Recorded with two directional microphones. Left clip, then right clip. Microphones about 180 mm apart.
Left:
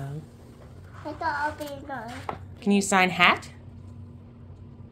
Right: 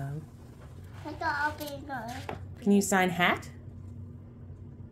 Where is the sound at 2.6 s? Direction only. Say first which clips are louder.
Left 4 dB; 5° right (ahead or behind).